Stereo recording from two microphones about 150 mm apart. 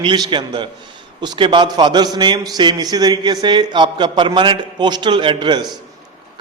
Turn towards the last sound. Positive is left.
turn(degrees=-30)  # may be behind; listen again after turning